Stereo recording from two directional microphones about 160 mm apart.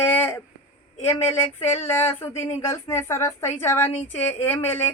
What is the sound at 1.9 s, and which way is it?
A woman's voice, 15° left (ahead or behind).